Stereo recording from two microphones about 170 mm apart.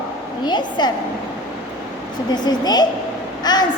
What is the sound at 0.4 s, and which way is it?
Speech, 25° left (ahead or behind).